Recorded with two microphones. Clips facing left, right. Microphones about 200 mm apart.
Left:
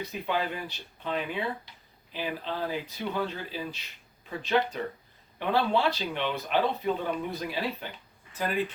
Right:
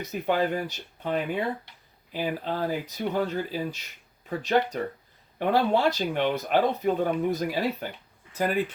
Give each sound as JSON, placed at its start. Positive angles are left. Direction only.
{"t": 0.0, "sound": "speech", "side_deg": -45}